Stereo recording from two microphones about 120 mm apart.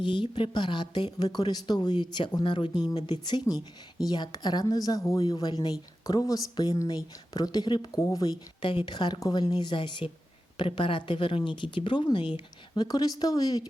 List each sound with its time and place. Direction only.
0.0 s a woman's voice: 40° left (ahead or behind)